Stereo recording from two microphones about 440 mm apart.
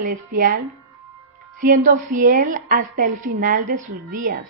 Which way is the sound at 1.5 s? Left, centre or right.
Centre.